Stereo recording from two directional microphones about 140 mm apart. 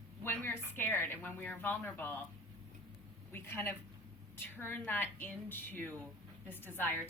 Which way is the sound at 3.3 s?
15° left (ahead or behind).